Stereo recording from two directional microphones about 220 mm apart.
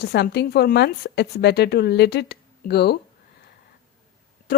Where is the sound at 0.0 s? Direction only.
50° left (ahead or behind).